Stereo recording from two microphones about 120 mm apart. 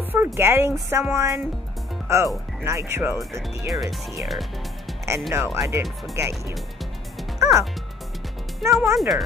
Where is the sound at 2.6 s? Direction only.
25° right (ahead or behind).